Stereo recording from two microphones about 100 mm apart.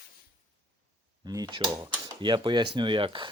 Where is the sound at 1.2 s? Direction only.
40° right (ahead or behind).